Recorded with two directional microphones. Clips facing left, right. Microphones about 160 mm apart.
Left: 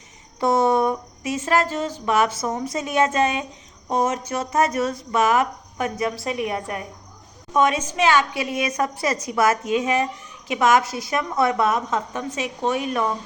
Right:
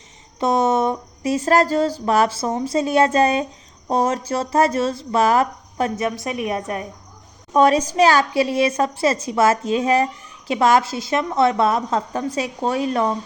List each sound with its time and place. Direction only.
0.3 s a sound: 20° right (ahead or behind)
1.2 s a woman's voice: 35° right (ahead or behind)
6.1 s a woman's voice: 20° right (ahead or behind)
7.5 s a woman's voice: 35° right (ahead or behind)